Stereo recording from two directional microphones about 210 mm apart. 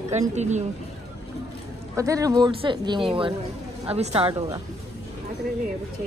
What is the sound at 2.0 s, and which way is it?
Speech, 15° right (ahead or behind).